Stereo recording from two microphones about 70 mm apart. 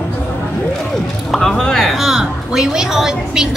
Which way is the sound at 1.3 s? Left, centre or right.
Centre.